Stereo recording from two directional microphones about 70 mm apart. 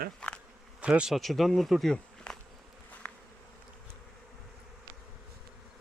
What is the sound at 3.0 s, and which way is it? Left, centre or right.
Bee, left.